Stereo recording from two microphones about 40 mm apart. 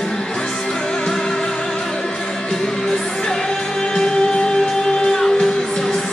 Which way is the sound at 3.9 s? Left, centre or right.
Centre.